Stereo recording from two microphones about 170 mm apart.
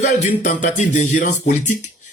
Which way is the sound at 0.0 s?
40° left (ahead or behind).